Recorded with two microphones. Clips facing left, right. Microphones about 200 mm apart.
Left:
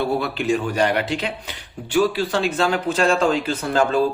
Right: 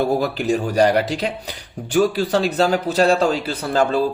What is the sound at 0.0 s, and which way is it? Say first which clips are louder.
Speech: right 3 dB; 40° right (ahead or behind).